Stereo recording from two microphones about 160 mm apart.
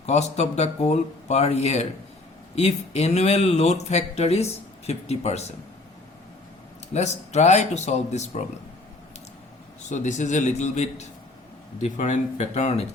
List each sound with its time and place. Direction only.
0.0 s speech: 45° left (ahead or behind)
6.9 s speech: 45° left (ahead or behind)
9.9 s speech: 50° left (ahead or behind)